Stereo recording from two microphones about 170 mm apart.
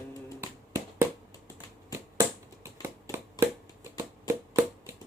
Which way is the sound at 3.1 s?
15° right (ahead or behind).